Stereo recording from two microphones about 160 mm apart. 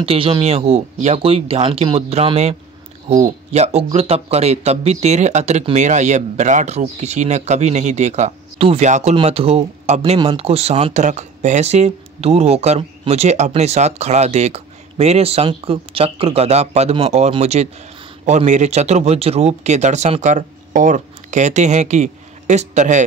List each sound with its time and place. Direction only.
0.0 s a man's voice: 35° right (ahead or behind)